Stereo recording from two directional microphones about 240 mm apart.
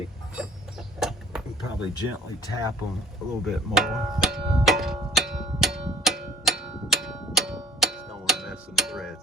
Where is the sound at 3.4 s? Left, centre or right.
Centre.